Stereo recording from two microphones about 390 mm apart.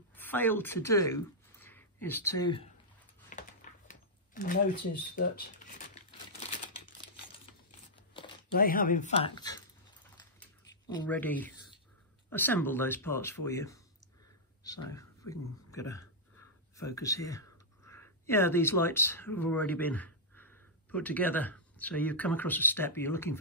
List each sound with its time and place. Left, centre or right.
0.1 s speech: centre
3.3 s a sound: centre
5.1 s speech: left
8.5 s speech: left
11.0 s speech: centre